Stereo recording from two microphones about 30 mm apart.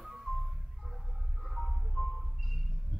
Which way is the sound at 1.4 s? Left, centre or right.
Centre.